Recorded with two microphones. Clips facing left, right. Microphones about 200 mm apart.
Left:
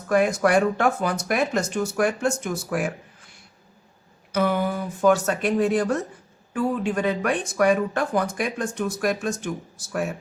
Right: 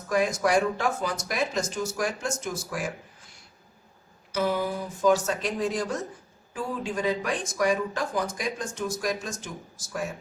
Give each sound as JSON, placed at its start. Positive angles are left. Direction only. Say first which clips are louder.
{"t": 0.1, "sound": "speech", "louder": "left 4 dB", "side_deg": 60}
{"t": 4.3, "sound": "speech", "louder": "left 4 dB", "side_deg": 60}